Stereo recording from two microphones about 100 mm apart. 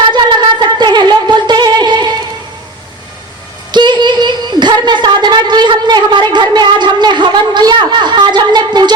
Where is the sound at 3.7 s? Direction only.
45° right (ahead or behind).